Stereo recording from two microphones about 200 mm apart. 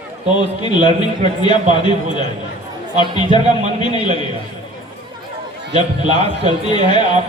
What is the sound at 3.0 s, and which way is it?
Speech, 25° left (ahead or behind).